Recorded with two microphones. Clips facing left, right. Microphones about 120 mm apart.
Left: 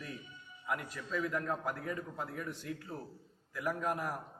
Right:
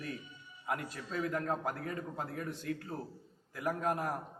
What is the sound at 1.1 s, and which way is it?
A man's voice, 40° right (ahead or behind).